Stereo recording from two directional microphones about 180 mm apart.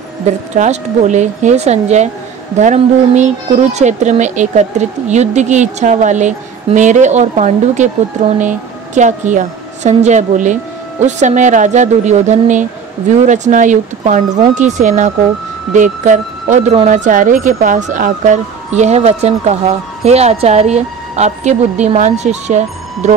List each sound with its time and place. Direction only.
0.6 s speech: 40° right (ahead or behind)